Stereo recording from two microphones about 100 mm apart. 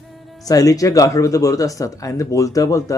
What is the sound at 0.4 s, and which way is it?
Speech, 35° left (ahead or behind).